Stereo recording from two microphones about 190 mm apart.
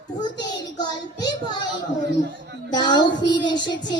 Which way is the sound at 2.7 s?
25° left (ahead or behind).